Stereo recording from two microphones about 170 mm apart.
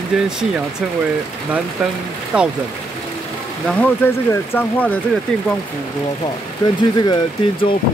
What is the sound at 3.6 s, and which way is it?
Speech, 10° left (ahead or behind).